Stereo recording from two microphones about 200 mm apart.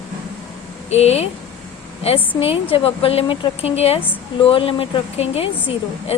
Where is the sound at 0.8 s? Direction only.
30° left (ahead or behind).